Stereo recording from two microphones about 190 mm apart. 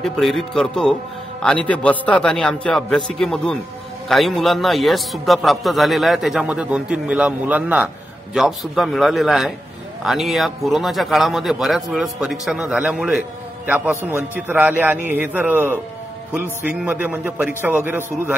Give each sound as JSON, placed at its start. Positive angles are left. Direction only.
{"t": 0.0, "sound": "a man's voice", "side_deg": 0}